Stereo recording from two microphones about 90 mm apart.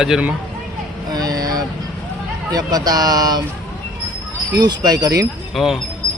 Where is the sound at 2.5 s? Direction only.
45° right (ahead or behind).